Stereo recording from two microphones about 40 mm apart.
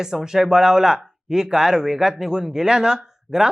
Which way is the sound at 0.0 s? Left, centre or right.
Centre.